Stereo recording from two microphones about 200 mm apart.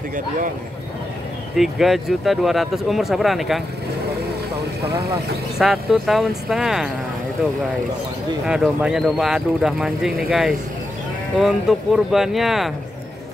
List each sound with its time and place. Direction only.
1.6 s speech: centre (ahead or behind)
4.8 s speech: 55° right (ahead or behind)
5.6 s speech: centre (ahead or behind)
8.5 s speech: 5° right (ahead or behind)